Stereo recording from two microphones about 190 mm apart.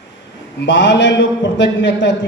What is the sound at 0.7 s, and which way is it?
A man's voice, 70° left (ahead or behind).